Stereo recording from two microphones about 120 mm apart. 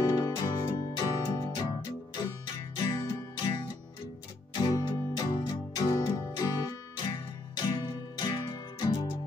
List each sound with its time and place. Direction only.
0.1 s music: 35° left (ahead or behind)